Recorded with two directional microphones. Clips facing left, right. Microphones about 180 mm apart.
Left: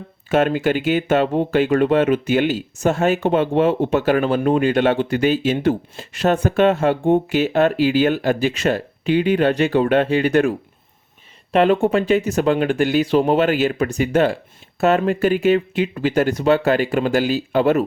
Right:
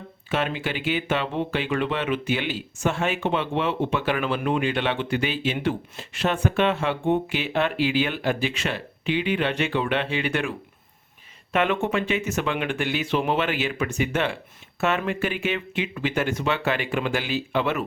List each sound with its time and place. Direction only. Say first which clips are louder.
0.3 s speech: left 9 dB; 45° left (ahead or behind)
11.5 s speech: left 8 dB; 35° left (ahead or behind)